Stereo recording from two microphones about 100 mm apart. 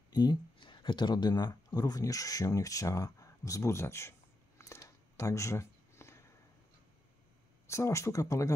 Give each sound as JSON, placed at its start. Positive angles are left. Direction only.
{"t": 0.1, "sound": "speech", "side_deg": 40}
{"t": 4.6, "sound": "a sound", "side_deg": 30}
{"t": 7.6, "sound": "speech", "side_deg": 30}